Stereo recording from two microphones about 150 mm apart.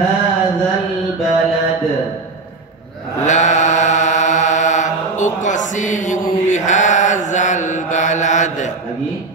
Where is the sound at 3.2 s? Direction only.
55° left (ahead or behind).